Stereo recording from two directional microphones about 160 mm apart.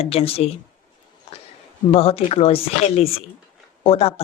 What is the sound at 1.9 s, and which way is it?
Speech, 35° left (ahead or behind).